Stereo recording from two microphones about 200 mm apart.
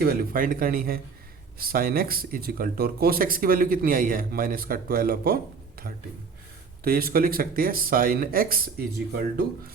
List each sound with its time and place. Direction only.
0.0 s speech: 45° right (ahead or behind)
6.8 s speech: 45° right (ahead or behind)